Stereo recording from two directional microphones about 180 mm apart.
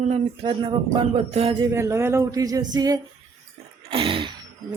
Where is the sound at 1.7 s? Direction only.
15° right (ahead or behind).